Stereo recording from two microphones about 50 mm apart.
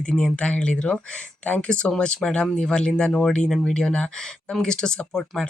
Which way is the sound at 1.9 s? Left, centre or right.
Centre.